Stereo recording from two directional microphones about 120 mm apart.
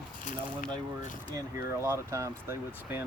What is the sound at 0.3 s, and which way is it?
Speech, 90° left.